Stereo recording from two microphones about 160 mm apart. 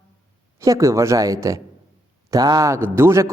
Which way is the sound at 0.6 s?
20° right (ahead or behind).